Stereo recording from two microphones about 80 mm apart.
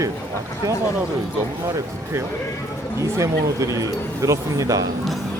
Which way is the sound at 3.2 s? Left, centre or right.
Right.